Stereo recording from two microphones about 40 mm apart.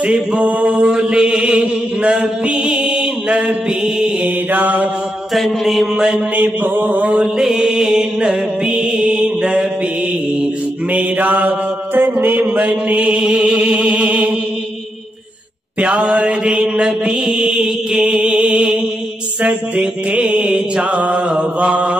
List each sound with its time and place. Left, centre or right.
0.0 s mantra: right
4.5 s mantra: right
5.3 s mantra: centre
5.9 s mantra: centre
6.3 s mantra: right
7.2 s music: centre
10.9 s mantra: right
12.4 s mantra: right
13.4 s music: right
15.8 s music: right
17.4 s mantra: centre
19.8 s music: right
20.9 s mantra: right